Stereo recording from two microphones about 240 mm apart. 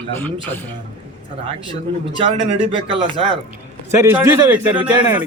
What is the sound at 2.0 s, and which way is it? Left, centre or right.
Speech, right.